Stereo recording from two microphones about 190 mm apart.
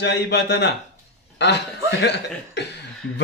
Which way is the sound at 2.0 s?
65° left (ahead or behind).